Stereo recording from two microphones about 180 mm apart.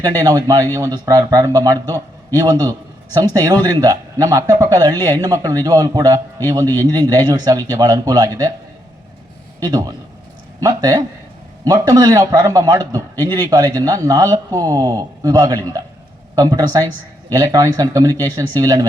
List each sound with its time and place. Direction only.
0.0 s speech: 20° right (ahead or behind)
9.6 s a man's voice: 20° right (ahead or behind)